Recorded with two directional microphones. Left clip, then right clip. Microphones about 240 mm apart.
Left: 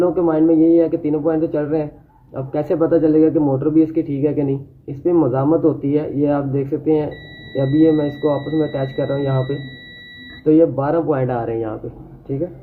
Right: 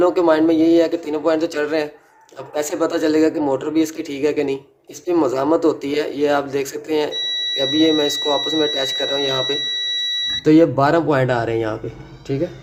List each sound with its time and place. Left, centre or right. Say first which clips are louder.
0.0 s speech: right 1 dB; right
3.0 s speech: left 2 dB; right